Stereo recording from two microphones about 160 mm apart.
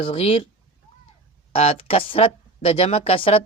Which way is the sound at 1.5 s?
35° left (ahead or behind).